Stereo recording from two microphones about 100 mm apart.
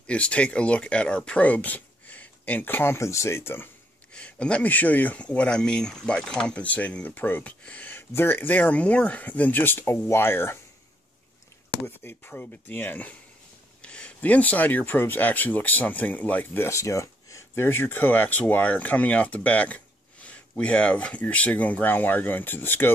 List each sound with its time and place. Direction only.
0.0 s speech: 10° left (ahead or behind)
4.1 s speech: 10° left (ahead or behind)
12.0 s speech: 20° left (ahead or behind)
16.6 s speech: 30° left (ahead or behind)